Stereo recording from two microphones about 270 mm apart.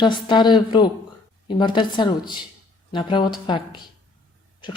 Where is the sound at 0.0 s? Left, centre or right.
Centre.